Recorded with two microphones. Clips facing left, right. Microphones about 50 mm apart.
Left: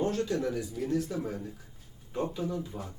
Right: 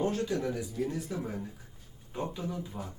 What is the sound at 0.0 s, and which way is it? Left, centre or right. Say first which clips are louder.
A man's voice: left 1 dB; centre.